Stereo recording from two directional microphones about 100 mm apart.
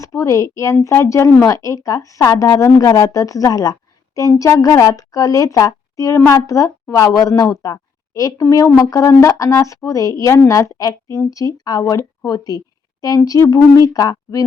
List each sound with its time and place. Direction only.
0.0 s a woman's voice: 30° left (ahead or behind)